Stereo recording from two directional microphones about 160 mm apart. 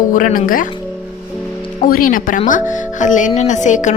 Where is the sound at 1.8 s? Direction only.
65° left (ahead or behind).